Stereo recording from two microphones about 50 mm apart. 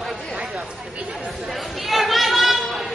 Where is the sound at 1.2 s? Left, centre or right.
Centre.